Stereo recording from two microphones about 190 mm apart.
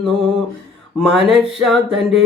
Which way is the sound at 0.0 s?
Centre (ahead or behind).